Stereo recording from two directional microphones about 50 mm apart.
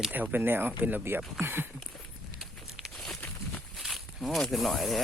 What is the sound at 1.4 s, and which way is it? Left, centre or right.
Speech, right.